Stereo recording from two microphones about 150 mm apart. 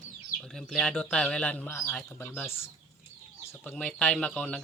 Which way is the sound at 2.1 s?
15° left (ahead or behind).